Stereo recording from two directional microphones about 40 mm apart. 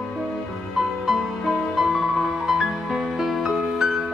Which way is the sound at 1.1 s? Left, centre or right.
Centre.